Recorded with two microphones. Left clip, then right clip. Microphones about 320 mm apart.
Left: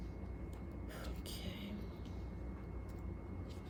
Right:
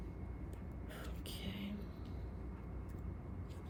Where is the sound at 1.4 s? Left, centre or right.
Centre.